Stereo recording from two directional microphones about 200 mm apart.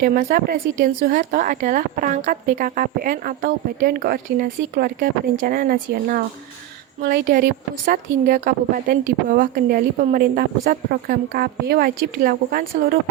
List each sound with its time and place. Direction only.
0.0 s speech: 45° right (ahead or behind)